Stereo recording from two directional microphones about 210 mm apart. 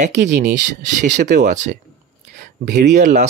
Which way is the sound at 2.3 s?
40° right (ahead or behind).